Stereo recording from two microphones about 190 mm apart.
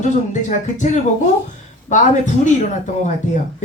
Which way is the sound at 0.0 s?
40° left (ahead or behind).